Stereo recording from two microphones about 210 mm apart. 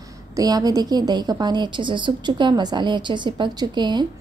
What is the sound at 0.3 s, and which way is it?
A woman's voice, 15° right (ahead or behind).